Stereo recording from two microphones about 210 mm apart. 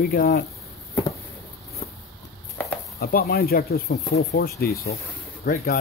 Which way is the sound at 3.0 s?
45° left (ahead or behind).